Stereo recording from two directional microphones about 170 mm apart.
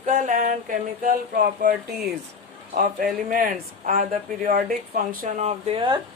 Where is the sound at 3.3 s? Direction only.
50° right (ahead or behind).